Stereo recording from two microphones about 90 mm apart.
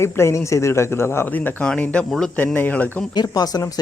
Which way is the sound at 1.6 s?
10° left (ahead or behind).